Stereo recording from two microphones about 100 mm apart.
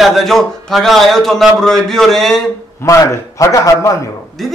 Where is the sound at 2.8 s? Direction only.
30° left (ahead or behind).